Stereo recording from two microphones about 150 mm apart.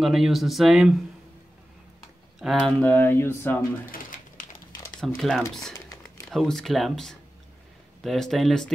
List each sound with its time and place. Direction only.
0.0 s speech: centre (ahead or behind)
2.3 s speech: centre (ahead or behind)
2.8 s speech: 10° left (ahead or behind)
3.9 s a sound: 65° left (ahead or behind)
4.9 s speech: centre (ahead or behind)